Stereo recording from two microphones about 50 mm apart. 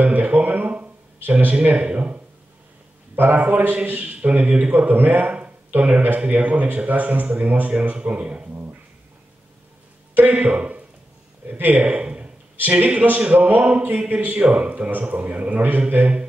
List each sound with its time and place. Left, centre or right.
0.0 s a sound: right
1.5 s speech: right
5.8 s speech: right
6.0 s speech: right
8.5 s beatboxing: right
10.1 s speech: right
12.0 s a sound: right
12.6 s speech: right